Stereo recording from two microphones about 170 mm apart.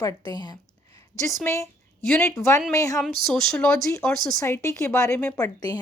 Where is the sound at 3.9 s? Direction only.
15° left (ahead or behind).